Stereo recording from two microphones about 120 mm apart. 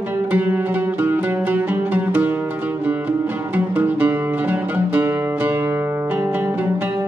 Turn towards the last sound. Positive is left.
turn(degrees=-15)  # may be behind; listen again after turning